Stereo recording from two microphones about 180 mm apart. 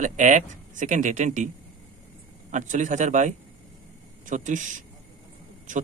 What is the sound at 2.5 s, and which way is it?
A man's voice, 45° right (ahead or behind).